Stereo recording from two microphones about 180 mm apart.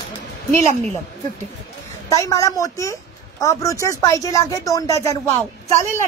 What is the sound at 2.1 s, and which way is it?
A woman's voice, 15° left (ahead or behind).